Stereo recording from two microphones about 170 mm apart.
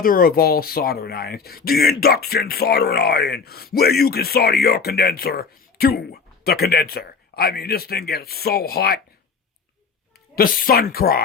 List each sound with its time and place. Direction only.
0.0 s speech: 55° left (ahead or behind)
10.3 s speech: 60° left (ahead or behind)